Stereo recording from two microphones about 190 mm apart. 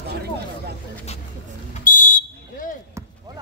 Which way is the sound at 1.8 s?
45° left (ahead or behind).